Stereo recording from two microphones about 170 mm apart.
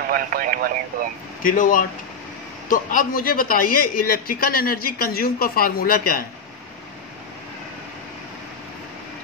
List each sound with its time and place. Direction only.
0.1 s speech: 55° right (ahead or behind)
1.4 s a man's voice: 50° left (ahead or behind)